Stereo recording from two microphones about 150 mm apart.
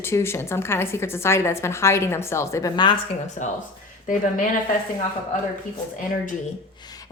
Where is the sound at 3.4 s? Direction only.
50° left (ahead or behind).